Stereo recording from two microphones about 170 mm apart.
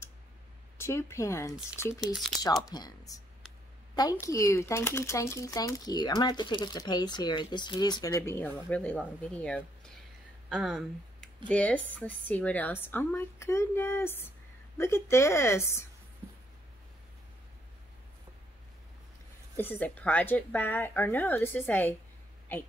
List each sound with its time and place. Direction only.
0.7 s speech: 15° left (ahead or behind)
10.5 s speech: 5° right (ahead or behind)
11.4 s speech: 10° left (ahead or behind)
19.5 s a woman's voice: 10° left (ahead or behind)